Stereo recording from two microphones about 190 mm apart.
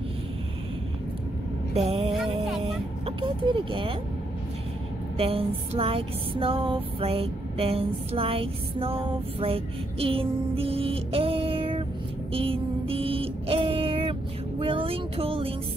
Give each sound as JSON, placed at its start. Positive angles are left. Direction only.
{"t": 1.7, "sound": "mantra", "side_deg": -35}
{"t": 3.2, "sound": "speech", "side_deg": -25}
{"t": 5.1, "sound": "music", "side_deg": -30}
{"t": 12.3, "sound": "a sound", "side_deg": -30}
{"t": 14.6, "sound": "music", "side_deg": -30}